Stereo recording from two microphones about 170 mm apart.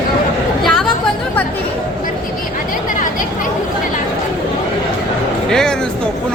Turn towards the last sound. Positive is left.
turn(degrees=5)  # may be behind; listen again after turning